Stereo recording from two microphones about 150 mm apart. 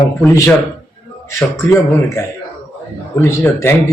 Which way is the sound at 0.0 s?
20° left (ahead or behind).